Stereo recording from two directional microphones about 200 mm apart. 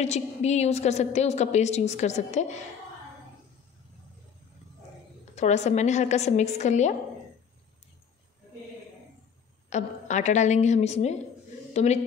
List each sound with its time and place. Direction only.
0.0 s a woman's voice: 35° left (ahead or behind)
5.3 s a woman's voice: 35° left (ahead or behind)
9.7 s a woman's voice: 35° left (ahead or behind)